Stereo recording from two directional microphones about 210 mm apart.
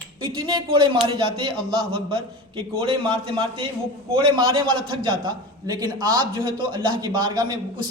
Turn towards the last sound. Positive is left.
turn(degrees=-20)  # may be behind; listen again after turning